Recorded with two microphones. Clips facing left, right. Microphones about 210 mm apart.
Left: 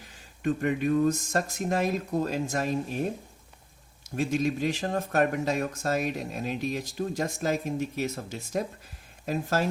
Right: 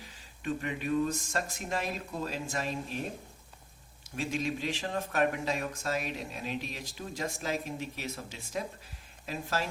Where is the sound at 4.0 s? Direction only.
45° left (ahead or behind).